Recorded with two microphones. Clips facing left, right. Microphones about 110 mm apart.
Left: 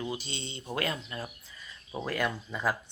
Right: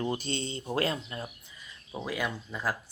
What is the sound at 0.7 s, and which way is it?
Speech, 30° right (ahead or behind).